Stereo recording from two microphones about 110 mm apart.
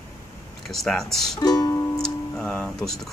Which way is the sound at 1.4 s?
35° left (ahead or behind).